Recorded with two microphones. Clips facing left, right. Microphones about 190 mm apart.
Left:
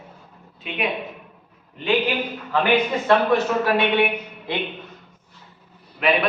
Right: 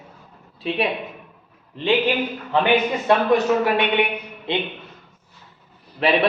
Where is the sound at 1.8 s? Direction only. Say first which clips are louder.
Right 2 dB; 30° right (ahead or behind).